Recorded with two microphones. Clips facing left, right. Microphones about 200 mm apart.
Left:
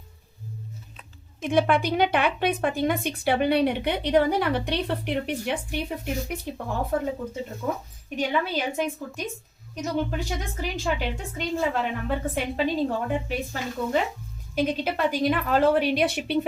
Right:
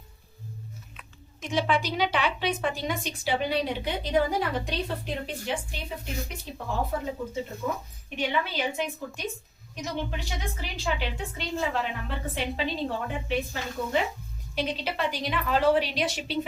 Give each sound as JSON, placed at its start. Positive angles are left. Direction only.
{"t": 1.4, "sound": "a woman's voice", "side_deg": 55}
{"t": 8.1, "sound": "a woman's voice", "side_deg": 45}